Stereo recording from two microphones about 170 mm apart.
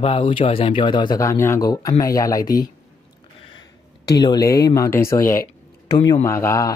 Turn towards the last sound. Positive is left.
turn(degrees=15)  # may be behind; listen again after turning